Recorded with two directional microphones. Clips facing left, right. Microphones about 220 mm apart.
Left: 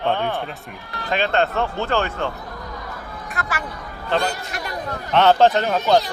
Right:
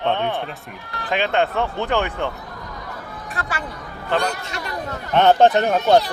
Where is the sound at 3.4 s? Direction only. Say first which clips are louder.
Even; 30° right (ahead or behind).